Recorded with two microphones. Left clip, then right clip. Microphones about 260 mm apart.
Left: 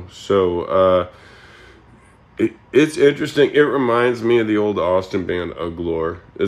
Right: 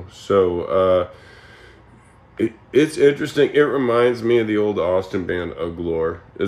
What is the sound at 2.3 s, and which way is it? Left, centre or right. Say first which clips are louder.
Speech: left 2 dB; centre.